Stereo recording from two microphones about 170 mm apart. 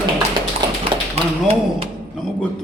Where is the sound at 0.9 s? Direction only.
30° right (ahead or behind).